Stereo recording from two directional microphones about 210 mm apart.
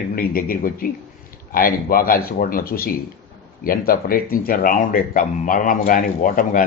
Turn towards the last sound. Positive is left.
turn(degrees=40)  # may be behind; listen again after turning